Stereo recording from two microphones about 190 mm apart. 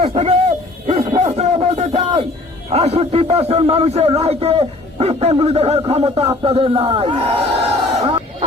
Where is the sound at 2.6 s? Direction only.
35° right (ahead or behind).